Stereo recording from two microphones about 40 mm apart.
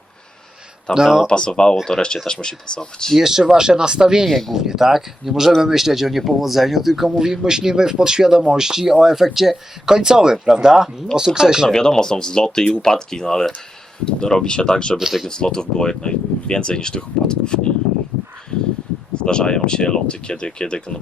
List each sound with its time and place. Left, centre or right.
0.9 s speech: left
3.2 s speech: centre
4.3 s speech: centre
4.5 s speech: centre
11.7 s speech: centre
19.1 s speech: left